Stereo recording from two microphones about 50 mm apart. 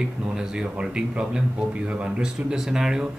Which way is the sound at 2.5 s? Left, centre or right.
Centre.